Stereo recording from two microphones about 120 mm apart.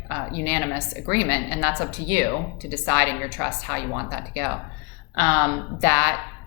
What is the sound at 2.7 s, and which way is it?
Speech, 20° left (ahead or behind).